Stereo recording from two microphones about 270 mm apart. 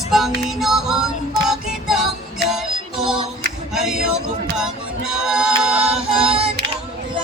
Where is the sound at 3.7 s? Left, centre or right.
Centre.